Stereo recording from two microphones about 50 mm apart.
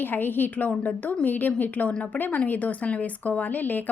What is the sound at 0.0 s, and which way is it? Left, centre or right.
A woman's voice, left.